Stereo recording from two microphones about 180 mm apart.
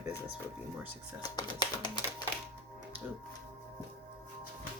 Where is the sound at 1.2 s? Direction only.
25° left (ahead or behind).